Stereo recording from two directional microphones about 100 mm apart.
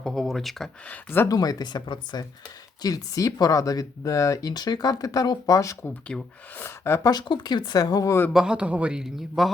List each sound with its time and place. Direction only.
0.0 s speech: centre (ahead or behind)
0.9 s speech: 20° left (ahead or behind)
1.3 s speech: 40° left (ahead or behind)
6.1 s speech: 10° left (ahead or behind)
6.6 s speech: 25° left (ahead or behind)
7.1 s speech: 45° left (ahead or behind)
8.3 s a man's voice: 10° right (ahead or behind)